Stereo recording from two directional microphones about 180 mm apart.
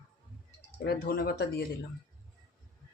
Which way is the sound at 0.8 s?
60° left (ahead or behind).